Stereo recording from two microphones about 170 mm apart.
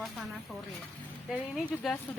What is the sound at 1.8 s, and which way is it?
Speech, centre (ahead or behind).